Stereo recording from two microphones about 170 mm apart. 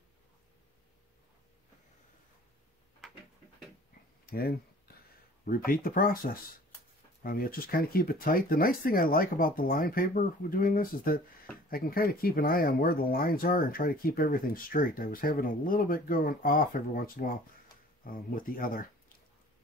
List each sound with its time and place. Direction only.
4.3 s speech: 60° left (ahead or behind)